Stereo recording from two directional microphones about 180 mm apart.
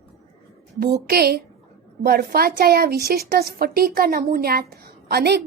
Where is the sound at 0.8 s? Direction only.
60° right (ahead or behind).